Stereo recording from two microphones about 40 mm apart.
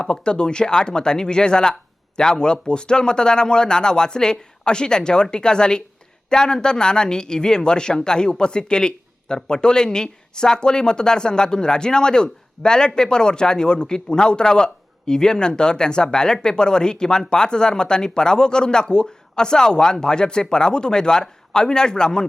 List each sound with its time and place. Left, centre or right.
0.0 s speech: left